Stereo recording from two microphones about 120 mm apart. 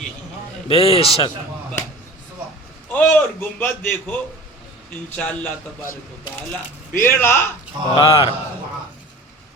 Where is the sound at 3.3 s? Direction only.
15° left (ahead or behind).